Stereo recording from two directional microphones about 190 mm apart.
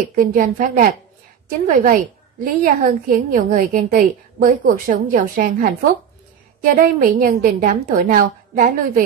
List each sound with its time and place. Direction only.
0.1 s a woman's voice: 45° right (ahead or behind)